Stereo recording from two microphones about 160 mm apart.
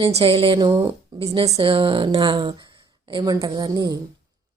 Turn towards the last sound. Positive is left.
turn(degrees=-25)  # may be behind; listen again after turning